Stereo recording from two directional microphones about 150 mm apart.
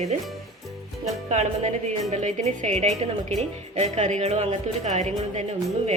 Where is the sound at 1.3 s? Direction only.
50° right (ahead or behind).